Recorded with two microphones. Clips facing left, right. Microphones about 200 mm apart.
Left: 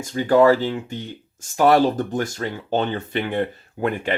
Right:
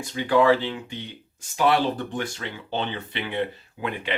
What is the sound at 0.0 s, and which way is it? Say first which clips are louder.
Speech: left 5 dB; 40° left (ahead or behind).